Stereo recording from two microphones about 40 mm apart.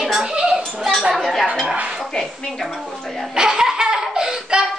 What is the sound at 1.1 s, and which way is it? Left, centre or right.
Speech, centre.